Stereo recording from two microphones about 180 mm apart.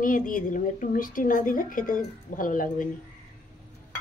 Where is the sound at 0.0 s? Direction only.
50° left (ahead or behind).